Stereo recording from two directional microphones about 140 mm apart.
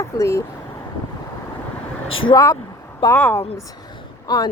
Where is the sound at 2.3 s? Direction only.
20° left (ahead or behind).